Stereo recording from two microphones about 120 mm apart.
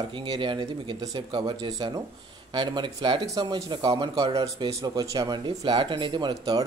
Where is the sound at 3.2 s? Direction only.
30° right (ahead or behind).